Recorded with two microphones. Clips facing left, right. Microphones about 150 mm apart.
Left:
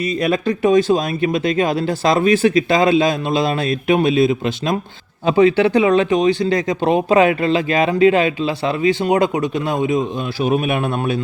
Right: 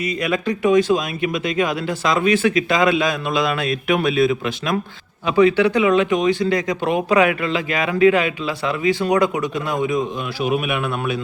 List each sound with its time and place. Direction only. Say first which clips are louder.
0.0 s speech: left 3 dB; 35° left (ahead or behind)